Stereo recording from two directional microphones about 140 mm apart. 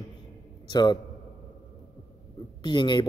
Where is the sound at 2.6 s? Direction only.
35° left (ahead or behind).